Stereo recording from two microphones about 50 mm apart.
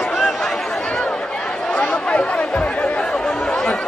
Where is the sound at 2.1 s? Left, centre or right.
Left.